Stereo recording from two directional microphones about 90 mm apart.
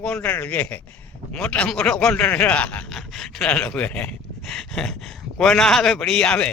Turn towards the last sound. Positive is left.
turn(degrees=10)  # may be behind; listen again after turning